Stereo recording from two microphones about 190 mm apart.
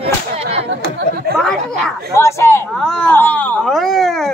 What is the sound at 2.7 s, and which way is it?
Speech, 5° left (ahead or behind).